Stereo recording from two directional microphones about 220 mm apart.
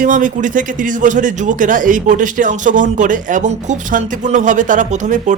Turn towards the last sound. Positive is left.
turn(degrees=-35)  # may be behind; listen again after turning